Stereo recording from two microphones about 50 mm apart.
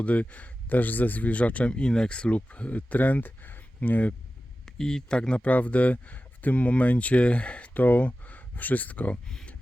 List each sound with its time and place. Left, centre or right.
0.0 s a man's voice: left
4.6 s a man's voice: centre; by 9.1 s left
9.2 s speech: centre